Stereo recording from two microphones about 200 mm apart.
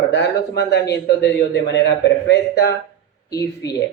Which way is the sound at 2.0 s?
60° left (ahead or behind).